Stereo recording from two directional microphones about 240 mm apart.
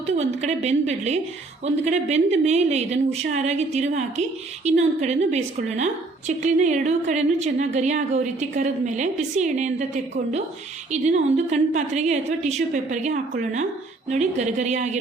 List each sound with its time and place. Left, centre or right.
0.0 s a woman's voice: right